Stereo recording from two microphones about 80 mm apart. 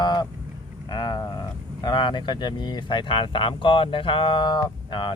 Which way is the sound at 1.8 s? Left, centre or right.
Left.